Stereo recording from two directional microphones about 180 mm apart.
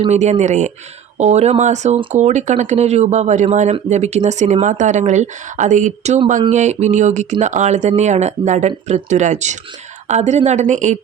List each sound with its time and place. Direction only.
0.0 s speech: 40° right (ahead or behind)